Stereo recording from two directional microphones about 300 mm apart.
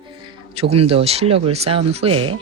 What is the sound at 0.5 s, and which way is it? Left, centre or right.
Speech, centre.